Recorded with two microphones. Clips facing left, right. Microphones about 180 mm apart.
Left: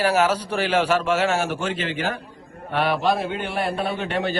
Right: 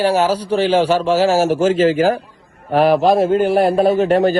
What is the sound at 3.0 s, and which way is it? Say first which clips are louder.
Speech: right 10 dB; centre (ahead or behind).